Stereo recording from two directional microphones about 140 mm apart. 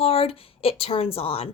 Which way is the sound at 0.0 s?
45° left (ahead or behind).